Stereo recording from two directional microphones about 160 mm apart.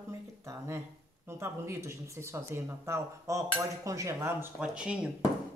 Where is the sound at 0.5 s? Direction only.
15° right (ahead or behind).